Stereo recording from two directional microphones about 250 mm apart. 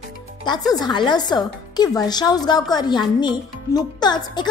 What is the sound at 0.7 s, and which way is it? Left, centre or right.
A woman's voice, centre.